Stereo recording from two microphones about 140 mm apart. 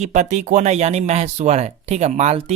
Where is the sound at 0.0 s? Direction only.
60° right (ahead or behind).